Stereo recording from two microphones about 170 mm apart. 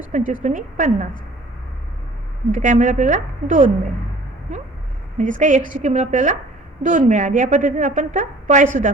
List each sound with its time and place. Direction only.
0.1 s a woman's voice: 50° right (ahead or behind)
2.5 s a woman's voice: 45° right (ahead or behind)
5.1 s a woman's voice: 50° right (ahead or behind)